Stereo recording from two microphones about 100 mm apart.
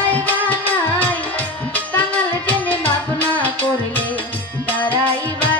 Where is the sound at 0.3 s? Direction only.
15° left (ahead or behind).